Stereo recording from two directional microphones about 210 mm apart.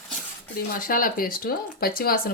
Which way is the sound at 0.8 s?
40° left (ahead or behind).